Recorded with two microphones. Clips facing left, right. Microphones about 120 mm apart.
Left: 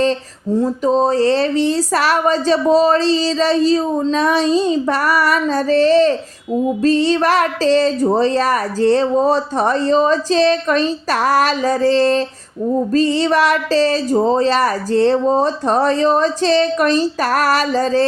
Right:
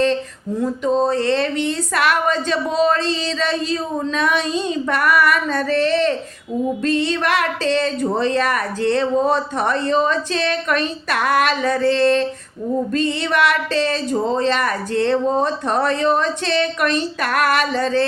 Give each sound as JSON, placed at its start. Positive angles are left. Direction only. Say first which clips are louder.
{"t": 0.6, "sound": "speech", "louder": "left 2 dB", "side_deg": 35}